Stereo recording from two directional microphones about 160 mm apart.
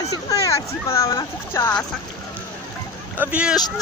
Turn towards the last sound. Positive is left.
turn(degrees=-5)  # may be behind; listen again after turning